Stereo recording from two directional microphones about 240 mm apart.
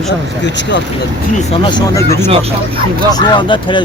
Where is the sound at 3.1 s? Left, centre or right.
Centre.